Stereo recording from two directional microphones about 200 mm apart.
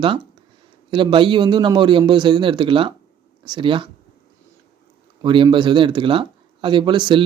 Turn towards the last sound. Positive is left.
turn(degrees=-25)  # may be behind; listen again after turning